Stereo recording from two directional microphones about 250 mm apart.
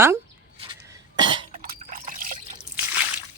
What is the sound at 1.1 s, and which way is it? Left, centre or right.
Cough, centre.